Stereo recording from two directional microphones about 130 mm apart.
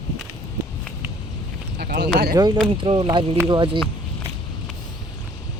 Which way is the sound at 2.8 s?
40° right (ahead or behind).